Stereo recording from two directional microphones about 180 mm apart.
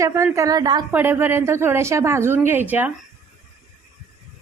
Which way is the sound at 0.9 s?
10° right (ahead or behind).